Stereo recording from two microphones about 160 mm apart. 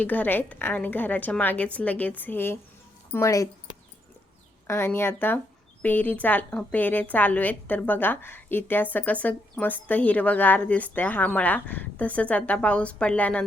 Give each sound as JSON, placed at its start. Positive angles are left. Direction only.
{"t": 0.0, "sound": "a woman's voice", "side_deg": 10}
{"t": 4.6, "sound": "a woman's voice", "side_deg": 15}